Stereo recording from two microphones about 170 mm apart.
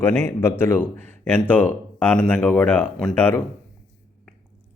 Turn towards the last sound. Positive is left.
turn(degrees=10)  # may be behind; listen again after turning